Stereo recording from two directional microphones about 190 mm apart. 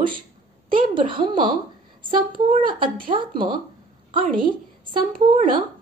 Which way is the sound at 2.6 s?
25° right (ahead or behind).